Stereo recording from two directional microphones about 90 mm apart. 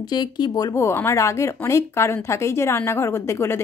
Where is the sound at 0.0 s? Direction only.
55° left (ahead or behind).